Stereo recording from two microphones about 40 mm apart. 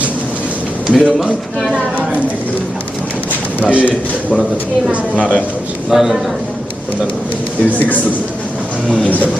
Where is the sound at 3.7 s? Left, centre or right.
Right.